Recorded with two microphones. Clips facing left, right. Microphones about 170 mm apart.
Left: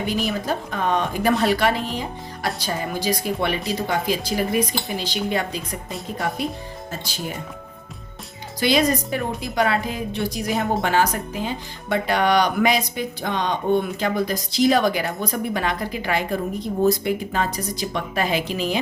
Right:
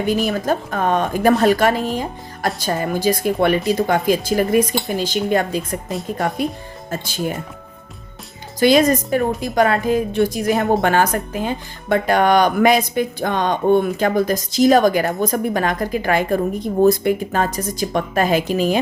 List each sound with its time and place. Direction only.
0.3 s speech: 45° right (ahead or behind)
6.9 s speech: 50° right (ahead or behind)
8.5 s speech: 45° right (ahead or behind)